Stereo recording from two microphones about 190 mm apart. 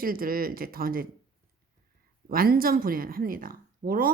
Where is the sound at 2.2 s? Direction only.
50° right (ahead or behind).